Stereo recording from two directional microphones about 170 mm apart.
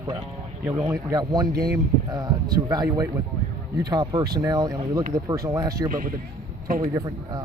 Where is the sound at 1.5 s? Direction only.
65° right (ahead or behind).